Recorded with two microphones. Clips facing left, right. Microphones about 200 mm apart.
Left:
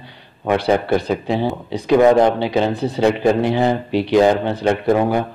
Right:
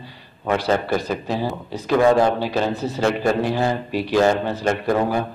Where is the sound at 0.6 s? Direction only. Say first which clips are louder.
Left 5 dB; 15° left (ahead or behind).